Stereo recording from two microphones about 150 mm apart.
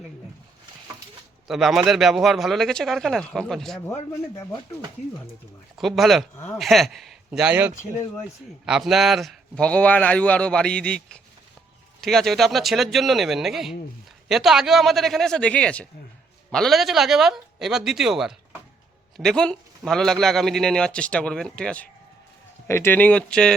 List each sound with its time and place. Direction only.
1.5 s a man's voice: centre (ahead or behind)
5.7 s a man's voice: centre (ahead or behind)
6.3 s a man's voice: 15° left (ahead or behind)
6.6 s a man's voice: centre (ahead or behind)